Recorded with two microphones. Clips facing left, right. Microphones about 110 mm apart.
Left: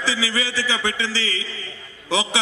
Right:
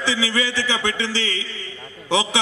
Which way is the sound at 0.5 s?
20° right (ahead or behind).